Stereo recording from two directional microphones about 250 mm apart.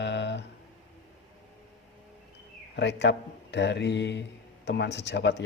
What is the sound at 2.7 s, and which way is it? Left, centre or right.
A man's voice, left.